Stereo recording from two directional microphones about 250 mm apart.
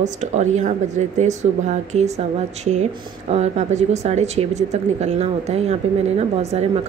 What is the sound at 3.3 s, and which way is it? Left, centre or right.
Speech, right.